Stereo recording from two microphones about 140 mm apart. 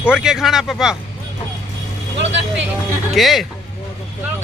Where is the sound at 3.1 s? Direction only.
Centre (ahead or behind).